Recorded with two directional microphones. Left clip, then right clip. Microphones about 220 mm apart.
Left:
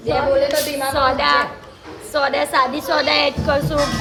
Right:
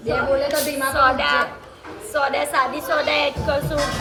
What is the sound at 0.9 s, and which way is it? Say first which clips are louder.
A woman's voice: left 1 dB; 45° left (ahead or behind).